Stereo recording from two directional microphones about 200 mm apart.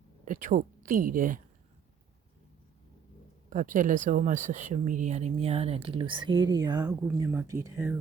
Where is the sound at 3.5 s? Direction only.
40° right (ahead or behind); by 7.9 s 10° right (ahead or behind).